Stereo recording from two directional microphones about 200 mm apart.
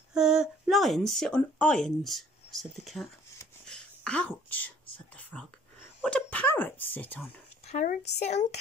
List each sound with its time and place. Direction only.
0.1 s speech: 5° right (ahead or behind)
3.6 s whispering: 5° left (ahead or behind)
5.9 s speech: 5° left (ahead or behind)
7.6 s speech: 40° left (ahead or behind)